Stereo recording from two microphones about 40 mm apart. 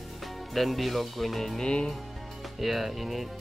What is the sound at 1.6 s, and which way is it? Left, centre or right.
Speech, left.